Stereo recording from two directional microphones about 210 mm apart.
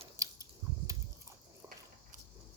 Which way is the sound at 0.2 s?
15° right (ahead or behind).